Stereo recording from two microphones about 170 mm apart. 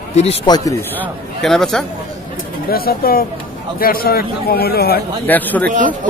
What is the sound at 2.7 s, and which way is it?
A man's voice, 60° left (ahead or behind).